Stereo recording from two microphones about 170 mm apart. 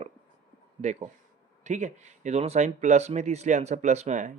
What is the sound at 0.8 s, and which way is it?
Speech, 40° right (ahead or behind).